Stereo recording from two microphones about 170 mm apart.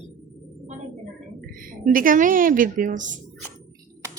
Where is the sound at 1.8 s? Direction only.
55° right (ahead or behind).